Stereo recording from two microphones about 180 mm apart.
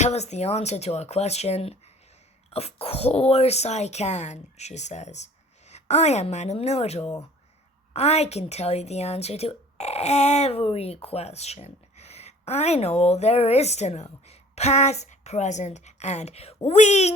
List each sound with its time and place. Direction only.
0.0 s a woman's voice: 40° left (ahead or behind)